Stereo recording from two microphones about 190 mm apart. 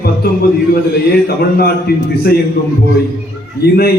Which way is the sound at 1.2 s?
55° left (ahead or behind).